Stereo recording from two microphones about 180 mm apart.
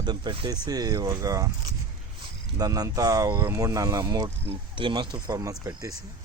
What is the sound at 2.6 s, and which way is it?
Speech, 20° right (ahead or behind).